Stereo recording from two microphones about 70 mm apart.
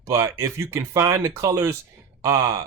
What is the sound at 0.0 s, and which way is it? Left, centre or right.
Speech, right.